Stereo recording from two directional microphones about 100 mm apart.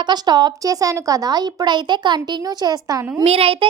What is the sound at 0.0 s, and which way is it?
A woman's voice, 45° right (ahead or behind).